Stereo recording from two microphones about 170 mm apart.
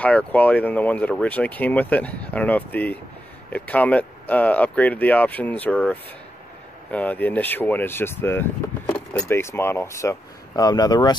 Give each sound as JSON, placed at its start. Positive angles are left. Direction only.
{"t": 0.0, "sound": "speech", "side_deg": 10}